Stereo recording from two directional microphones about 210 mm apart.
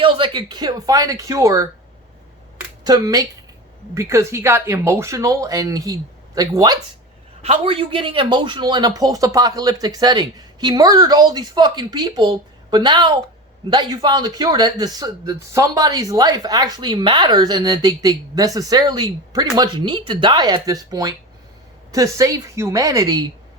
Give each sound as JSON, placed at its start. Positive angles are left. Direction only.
{"t": 0.0, "sound": "speech", "side_deg": -25}
{"t": 2.8, "sound": "speech", "side_deg": -20}
{"t": 7.4, "sound": "speech", "side_deg": -30}